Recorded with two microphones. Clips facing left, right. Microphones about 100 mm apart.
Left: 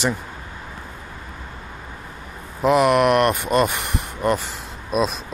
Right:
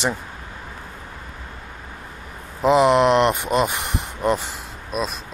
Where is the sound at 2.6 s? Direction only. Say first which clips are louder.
Right 1 dB; 20° right (ahead or behind).